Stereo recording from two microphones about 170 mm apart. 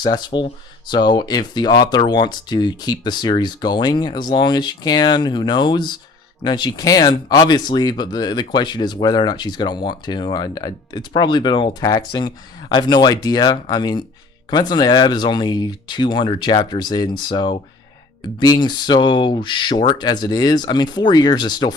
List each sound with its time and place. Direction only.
0.0 s speech: 25° left (ahead or behind)